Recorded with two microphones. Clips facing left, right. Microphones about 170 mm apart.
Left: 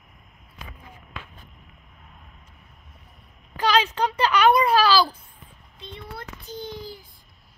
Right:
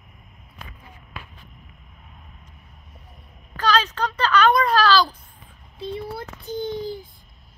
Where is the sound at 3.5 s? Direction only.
15° left (ahead or behind).